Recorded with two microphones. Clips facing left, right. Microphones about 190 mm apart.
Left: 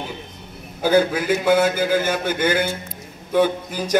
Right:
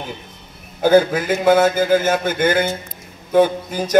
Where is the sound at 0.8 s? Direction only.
45° right (ahead or behind).